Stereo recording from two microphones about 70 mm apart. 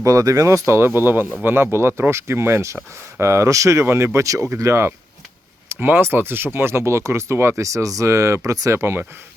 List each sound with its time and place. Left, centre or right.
0.0 s speech: right
0.7 s speech: right